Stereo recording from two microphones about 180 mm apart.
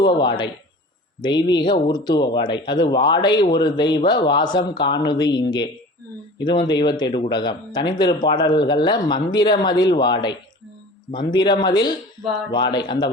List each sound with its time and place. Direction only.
0.0 s speech: 25° left (ahead or behind)